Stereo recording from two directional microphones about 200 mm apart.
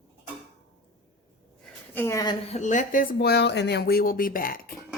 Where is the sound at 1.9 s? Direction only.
15° left (ahead or behind).